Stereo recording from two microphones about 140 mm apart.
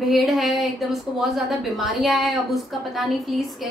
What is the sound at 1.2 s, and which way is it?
A woman's voice, centre (ahead or behind).